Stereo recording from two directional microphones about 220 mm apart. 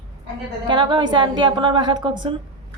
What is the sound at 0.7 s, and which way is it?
A woman's voice, 20° right (ahead or behind).